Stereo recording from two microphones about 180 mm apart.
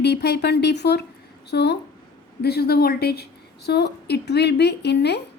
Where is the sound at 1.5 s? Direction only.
65° left (ahead or behind).